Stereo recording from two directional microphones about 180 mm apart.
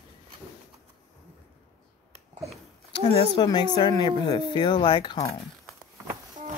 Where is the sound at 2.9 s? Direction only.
25° left (ahead or behind).